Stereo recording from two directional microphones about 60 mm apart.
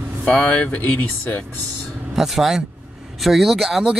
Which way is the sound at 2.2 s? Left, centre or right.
Centre.